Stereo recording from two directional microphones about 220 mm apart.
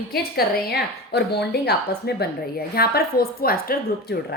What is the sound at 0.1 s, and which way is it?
A woman's voice, 45° left (ahead or behind).